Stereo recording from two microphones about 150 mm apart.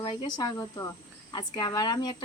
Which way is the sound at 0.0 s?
30° left (ahead or behind).